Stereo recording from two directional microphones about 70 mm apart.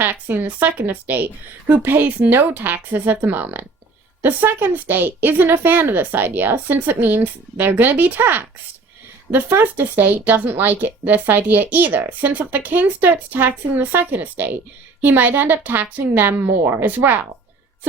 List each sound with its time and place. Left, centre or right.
0.0 s speech: right